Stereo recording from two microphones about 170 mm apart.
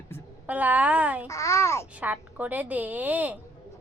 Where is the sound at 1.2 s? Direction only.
20° left (ahead or behind).